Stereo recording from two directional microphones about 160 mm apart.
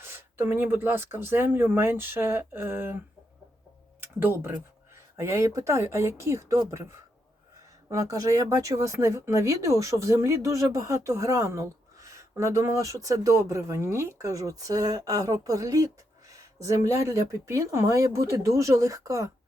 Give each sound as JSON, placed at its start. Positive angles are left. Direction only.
{"t": 0.0, "sound": "speech", "side_deg": -15}
{"t": 4.0, "sound": "speech", "side_deg": -15}